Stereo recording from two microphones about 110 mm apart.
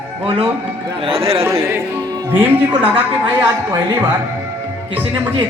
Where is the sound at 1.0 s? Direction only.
60° right (ahead or behind).